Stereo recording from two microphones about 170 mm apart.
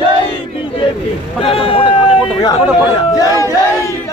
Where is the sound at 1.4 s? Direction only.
35° left (ahead or behind).